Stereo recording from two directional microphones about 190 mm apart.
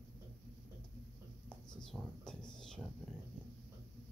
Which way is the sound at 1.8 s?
5° left (ahead or behind).